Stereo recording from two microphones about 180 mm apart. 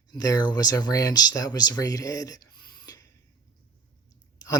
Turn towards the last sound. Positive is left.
turn(degrees=20)  # may be behind; listen again after turning